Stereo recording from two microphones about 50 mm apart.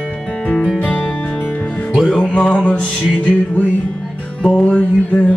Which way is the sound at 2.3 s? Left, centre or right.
Left.